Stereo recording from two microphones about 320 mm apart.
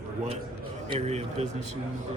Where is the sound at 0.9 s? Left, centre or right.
Centre.